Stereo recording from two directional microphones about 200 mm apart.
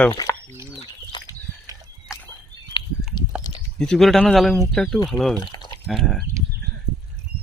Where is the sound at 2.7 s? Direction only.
25° left (ahead or behind).